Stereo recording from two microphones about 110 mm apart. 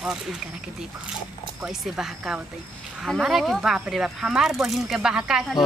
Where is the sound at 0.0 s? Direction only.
5° right (ahead or behind).